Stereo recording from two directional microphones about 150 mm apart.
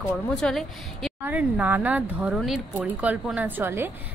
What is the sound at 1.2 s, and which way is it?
A woman's voice, 10° right (ahead or behind).